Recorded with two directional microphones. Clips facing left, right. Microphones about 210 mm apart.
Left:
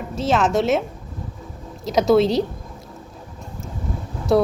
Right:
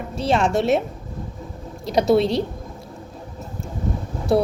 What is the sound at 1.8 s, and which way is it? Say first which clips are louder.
Speech: left 1 dB; centre (ahead or behind).